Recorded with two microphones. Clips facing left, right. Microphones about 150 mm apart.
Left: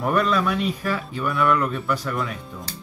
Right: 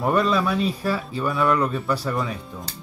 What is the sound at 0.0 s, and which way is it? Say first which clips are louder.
Speech: right 1 dB; 25° right (ahead or behind).